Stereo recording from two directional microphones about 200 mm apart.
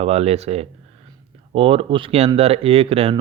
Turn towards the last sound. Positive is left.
turn(degrees=-30)  # may be behind; listen again after turning